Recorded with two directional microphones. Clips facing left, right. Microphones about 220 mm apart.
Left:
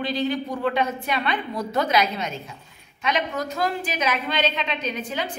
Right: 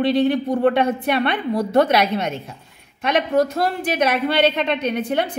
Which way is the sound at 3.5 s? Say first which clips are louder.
Right 4 dB; 60° right (ahead or behind).